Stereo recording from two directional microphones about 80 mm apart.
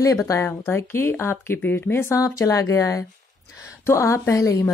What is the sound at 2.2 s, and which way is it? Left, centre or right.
A woman's voice, left.